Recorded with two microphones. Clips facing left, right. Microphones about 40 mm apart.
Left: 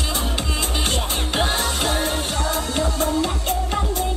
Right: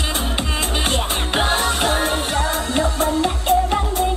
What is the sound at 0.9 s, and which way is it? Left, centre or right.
Music, centre.